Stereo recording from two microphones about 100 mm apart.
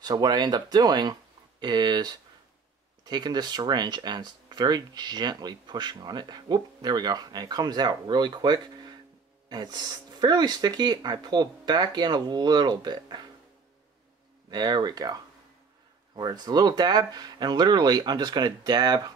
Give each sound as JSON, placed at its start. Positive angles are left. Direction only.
{"t": 0.0, "sound": "speech", "side_deg": -40}
{"t": 14.5, "sound": "speech", "side_deg": -45}
{"t": 16.2, "sound": "speech", "side_deg": -45}